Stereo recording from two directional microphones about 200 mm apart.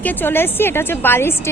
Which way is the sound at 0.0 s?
10° left (ahead or behind).